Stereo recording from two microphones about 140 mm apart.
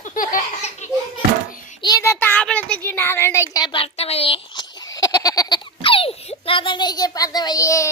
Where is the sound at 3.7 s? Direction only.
45° left (ahead or behind).